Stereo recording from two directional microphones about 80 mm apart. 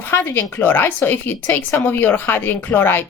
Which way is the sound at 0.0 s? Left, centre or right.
Left.